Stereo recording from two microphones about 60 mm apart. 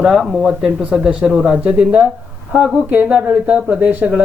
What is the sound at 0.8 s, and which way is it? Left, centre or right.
Speech, centre.